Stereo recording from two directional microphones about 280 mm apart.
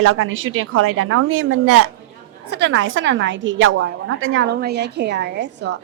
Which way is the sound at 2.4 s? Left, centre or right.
Right.